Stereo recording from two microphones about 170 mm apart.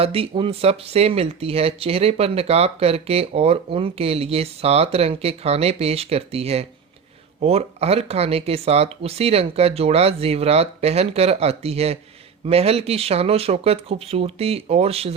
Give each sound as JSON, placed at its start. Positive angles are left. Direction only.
{"t": 0.0, "sound": "speech", "side_deg": -35}